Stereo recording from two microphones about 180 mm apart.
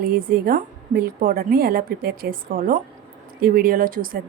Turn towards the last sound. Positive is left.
turn(degrees=-50)  # may be behind; listen again after turning